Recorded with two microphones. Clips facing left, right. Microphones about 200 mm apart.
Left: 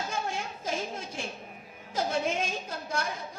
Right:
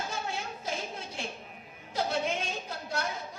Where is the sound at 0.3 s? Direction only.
45° left (ahead or behind).